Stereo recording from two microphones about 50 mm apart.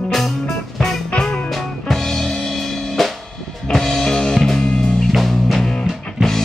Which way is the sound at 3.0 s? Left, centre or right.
Centre.